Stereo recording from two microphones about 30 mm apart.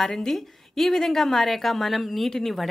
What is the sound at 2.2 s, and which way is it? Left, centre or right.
Speech, centre.